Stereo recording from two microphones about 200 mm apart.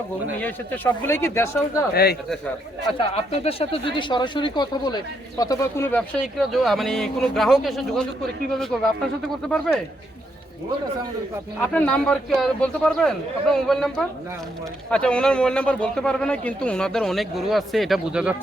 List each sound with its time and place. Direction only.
0.3 s speech: 10° left (ahead or behind)
1.9 s speech: 50° left (ahead or behind)
3.2 s speech: 30° left (ahead or behind); by 8.8 s centre (ahead or behind)
11.6 s speech: 5° left (ahead or behind)